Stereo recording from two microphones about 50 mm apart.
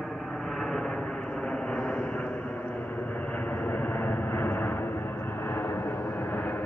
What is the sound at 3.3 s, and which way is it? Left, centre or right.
Vehicle, left.